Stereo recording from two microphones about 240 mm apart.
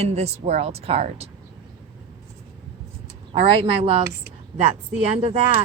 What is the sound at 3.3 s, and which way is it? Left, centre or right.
Speech, right.